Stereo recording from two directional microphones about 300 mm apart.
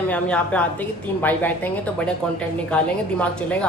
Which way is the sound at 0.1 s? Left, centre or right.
Centre.